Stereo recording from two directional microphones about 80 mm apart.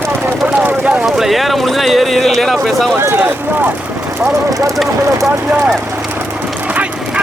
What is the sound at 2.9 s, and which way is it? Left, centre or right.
Speech, right.